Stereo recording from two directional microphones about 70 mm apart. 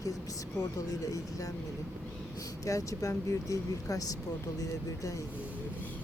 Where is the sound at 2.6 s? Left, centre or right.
Left.